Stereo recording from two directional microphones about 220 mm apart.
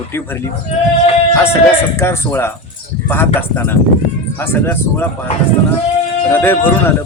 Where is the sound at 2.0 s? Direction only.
10° left (ahead or behind).